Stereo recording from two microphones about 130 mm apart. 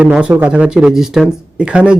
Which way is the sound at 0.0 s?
10° right (ahead or behind).